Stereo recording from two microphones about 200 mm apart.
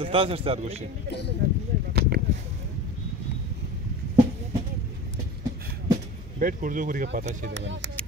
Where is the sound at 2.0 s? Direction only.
55° right (ahead or behind).